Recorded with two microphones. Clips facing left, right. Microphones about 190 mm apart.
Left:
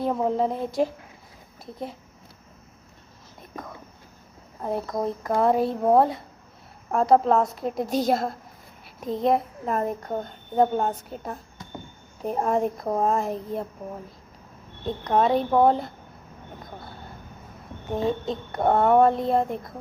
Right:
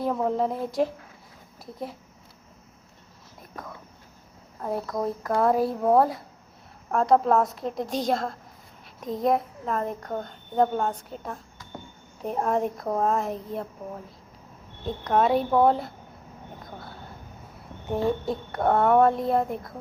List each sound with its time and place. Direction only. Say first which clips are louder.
0.0 s a woman's voice: left 1 dB; centre (ahead or behind)
4.6 s speech: left 1 dB; 20° left (ahead or behind)
5.2 s a woman's voice: left 1 dB; centre (ahead or behind)
14.8 s a woman's voice: left 1 dB; centre (ahead or behind)
17.9 s a woman's voice: even; 20° left (ahead or behind)
18.5 s a woman's voice: left 1 dB; centre (ahead or behind)